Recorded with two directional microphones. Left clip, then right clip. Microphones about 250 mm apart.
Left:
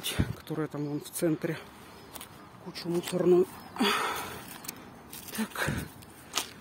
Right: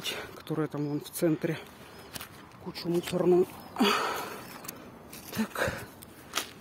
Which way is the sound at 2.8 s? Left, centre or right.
Centre.